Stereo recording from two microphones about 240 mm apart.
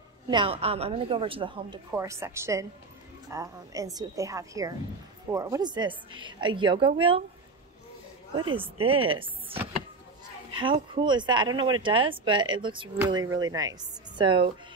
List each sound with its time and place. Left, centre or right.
0.3 s a woman's voice: right
8.4 s a woman's voice: centre
10.6 s a woman's voice: centre